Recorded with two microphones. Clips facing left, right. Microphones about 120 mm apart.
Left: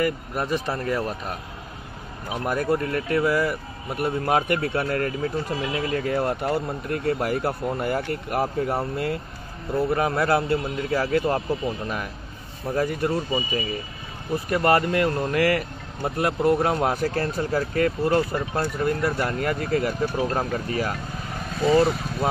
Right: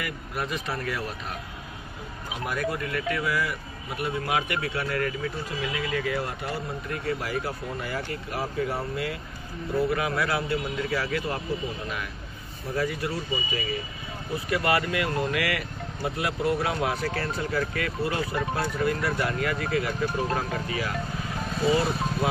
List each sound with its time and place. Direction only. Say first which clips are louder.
0.0 s speech: left 7 dB; 35° left (ahead or behind)
2.4 s a man's voice: left 6 dB; 40° left (ahead or behind)
12.7 s a man's voice: left 5 dB; 45° left (ahead or behind)